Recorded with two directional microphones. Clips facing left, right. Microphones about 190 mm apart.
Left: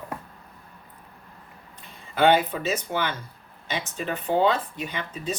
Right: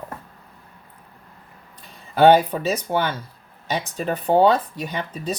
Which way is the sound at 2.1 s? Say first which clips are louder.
Right 6 dB; 40° right (ahead or behind).